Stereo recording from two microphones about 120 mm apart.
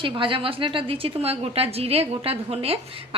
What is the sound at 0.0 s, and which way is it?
A woman's voice, 45° right (ahead or behind).